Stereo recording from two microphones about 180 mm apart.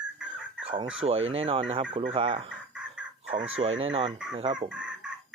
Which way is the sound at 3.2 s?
90° right.